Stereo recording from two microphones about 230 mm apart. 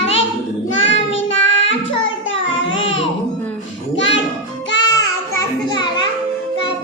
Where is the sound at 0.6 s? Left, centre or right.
Left.